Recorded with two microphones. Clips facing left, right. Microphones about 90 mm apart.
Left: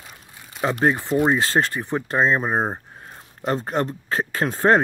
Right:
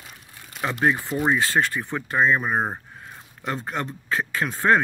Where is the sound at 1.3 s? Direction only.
30° left (ahead or behind).